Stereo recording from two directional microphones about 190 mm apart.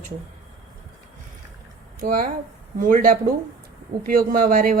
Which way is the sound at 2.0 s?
45° right (ahead or behind).